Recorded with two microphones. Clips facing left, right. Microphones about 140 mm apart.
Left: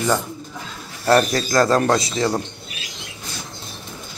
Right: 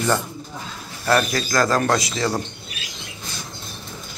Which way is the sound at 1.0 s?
30° left (ahead or behind).